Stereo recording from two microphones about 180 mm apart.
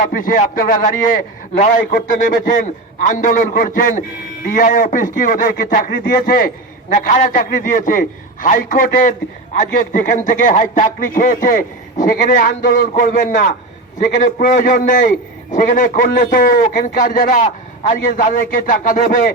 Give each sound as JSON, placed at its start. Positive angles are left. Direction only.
{"t": 0.0, "sound": "a man's voice", "side_deg": 50}
{"t": 7.2, "sound": "a man's voice", "side_deg": 50}